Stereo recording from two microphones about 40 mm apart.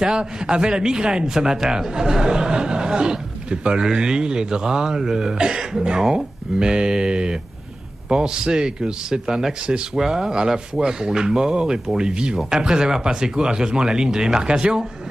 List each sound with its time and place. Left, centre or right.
0.2 s a man's voice: right